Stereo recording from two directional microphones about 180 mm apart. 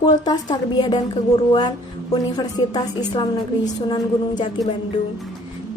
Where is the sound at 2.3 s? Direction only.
25° left (ahead or behind).